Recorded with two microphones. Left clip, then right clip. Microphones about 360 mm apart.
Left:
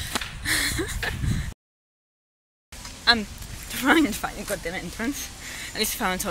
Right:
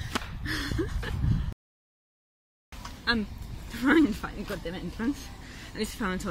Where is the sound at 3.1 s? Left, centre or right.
Centre.